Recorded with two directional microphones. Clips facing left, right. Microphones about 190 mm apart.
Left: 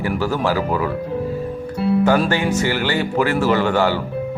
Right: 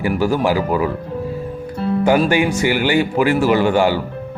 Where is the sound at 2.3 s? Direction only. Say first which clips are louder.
Right 3 dB; 15° right (ahead or behind).